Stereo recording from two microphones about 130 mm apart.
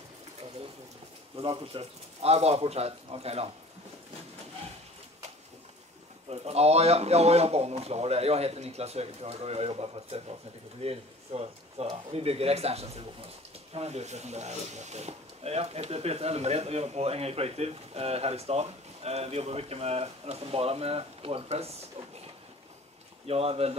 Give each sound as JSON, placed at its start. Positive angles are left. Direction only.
{"t": 1.3, "sound": "speech", "side_deg": -45}
{"t": 6.3, "sound": "speech", "side_deg": -55}
{"t": 23.2, "sound": "speech", "side_deg": -50}